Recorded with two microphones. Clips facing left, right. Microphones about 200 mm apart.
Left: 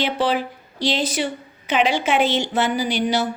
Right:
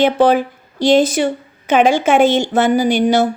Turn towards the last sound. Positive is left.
turn(degrees=-50)  # may be behind; listen again after turning